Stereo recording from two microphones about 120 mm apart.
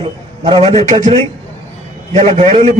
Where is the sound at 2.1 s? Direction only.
55° right (ahead or behind).